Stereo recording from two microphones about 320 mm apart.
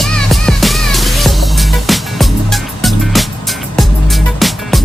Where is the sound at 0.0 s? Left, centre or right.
Centre.